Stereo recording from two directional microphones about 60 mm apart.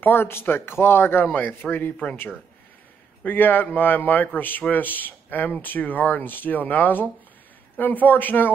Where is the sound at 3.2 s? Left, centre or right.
Left.